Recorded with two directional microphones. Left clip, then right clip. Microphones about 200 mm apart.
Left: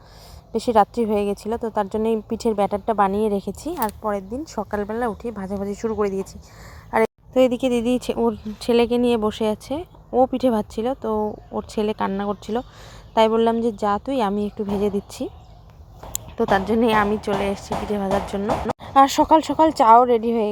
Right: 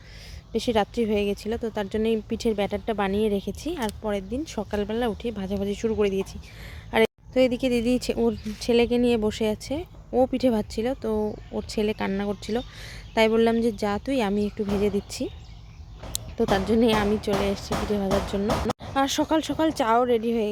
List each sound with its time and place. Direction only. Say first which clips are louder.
0.5 s speech: left 6 dB; 5° left (ahead or behind)
7.3 s speech: left 4 dB; 15° left (ahead or behind)
16.4 s speech: left 3 dB; 10° right (ahead or behind)
18.8 s speech: left 9 dB; 20° left (ahead or behind)